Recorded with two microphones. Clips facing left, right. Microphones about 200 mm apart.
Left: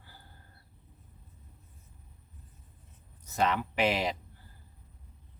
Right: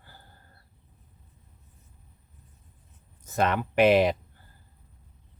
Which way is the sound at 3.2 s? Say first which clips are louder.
Right 3 dB; 55° right (ahead or behind).